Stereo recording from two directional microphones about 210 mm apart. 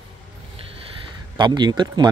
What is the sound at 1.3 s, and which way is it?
Speech, 20° right (ahead or behind).